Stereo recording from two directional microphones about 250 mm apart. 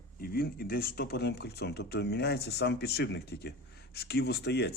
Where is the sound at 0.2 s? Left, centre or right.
Left.